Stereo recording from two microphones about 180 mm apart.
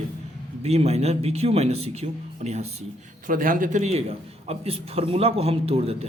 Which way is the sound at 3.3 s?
50° right (ahead or behind).